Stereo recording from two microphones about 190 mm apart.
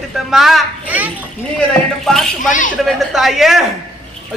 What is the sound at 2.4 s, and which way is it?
Speech, 45° left (ahead or behind).